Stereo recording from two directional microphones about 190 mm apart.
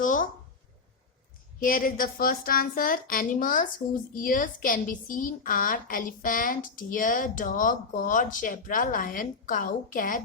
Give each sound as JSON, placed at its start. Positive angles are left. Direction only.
{"t": 0.0, "sound": "speech", "side_deg": 45}
{"t": 1.5, "sound": "speech", "side_deg": 50}